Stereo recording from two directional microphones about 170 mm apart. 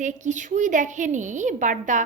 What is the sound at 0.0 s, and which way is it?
A woman's voice, 45° right (ahead or behind).